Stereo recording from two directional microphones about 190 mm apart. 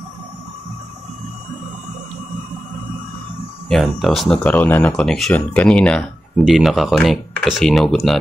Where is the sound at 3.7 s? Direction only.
Centre (ahead or behind).